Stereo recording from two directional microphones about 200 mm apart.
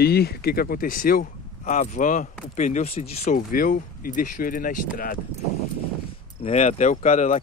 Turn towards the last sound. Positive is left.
turn(degrees=35)  # may be behind; listen again after turning